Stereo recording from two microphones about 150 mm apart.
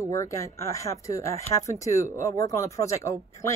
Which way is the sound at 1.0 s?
20° left (ahead or behind).